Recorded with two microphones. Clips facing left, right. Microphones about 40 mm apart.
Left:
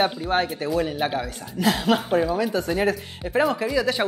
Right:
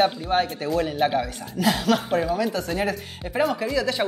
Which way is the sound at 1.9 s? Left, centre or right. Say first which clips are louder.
Left 1 dB; centre.